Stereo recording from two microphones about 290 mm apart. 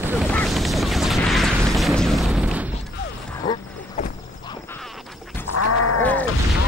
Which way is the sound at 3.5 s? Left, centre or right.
Centre.